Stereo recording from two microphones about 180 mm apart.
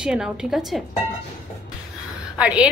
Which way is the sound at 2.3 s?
5° right (ahead or behind).